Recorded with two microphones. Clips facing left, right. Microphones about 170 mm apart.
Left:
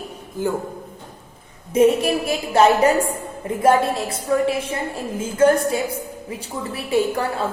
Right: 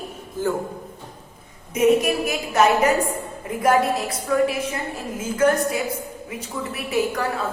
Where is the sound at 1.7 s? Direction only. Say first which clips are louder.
Left 2 dB; 30° left (ahead or behind).